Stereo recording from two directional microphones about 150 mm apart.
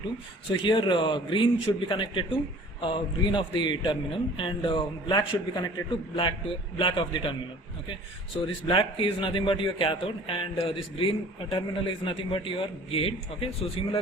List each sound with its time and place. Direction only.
0.6 s speech: 35° left (ahead or behind)
8.6 s speech: 35° left (ahead or behind)